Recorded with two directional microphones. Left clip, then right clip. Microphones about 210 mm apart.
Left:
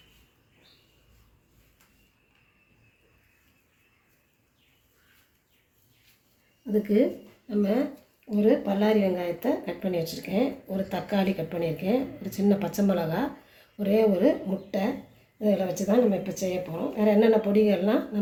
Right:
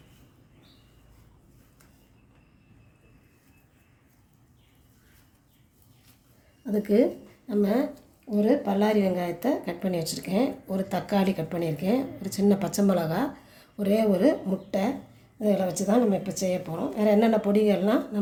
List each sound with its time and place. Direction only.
6.8 s speech: 55° right (ahead or behind)